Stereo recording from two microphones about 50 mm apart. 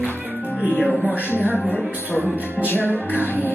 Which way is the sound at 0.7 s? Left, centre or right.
Centre.